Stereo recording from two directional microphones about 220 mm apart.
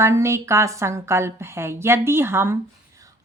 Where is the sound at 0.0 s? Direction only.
10° right (ahead or behind).